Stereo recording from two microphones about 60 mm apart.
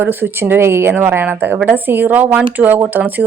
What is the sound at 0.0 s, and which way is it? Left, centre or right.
Speech, right.